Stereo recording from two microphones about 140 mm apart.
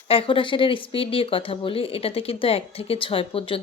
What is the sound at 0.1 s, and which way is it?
Speech, 40° left (ahead or behind).